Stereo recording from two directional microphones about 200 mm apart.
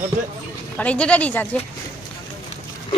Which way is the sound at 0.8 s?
5° left (ahead or behind).